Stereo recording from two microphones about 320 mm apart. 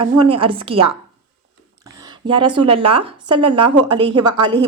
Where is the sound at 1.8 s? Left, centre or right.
Centre.